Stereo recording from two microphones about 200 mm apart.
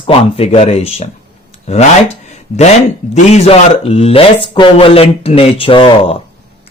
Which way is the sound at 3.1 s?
30° left (ahead or behind).